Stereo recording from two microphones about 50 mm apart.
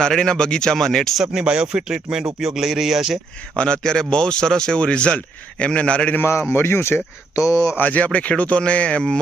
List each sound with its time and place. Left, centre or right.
0.0 s speech: centre
1.1 s speech: centre
3.5 s speech: centre
6.5 s speech: left
7.8 s speech: left